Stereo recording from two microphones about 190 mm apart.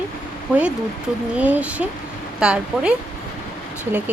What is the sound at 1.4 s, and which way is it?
Speech, 10° right (ahead or behind).